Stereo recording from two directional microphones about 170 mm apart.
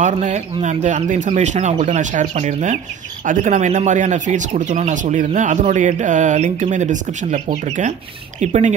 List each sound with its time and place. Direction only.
0.0 s speech: 45° right (ahead or behind)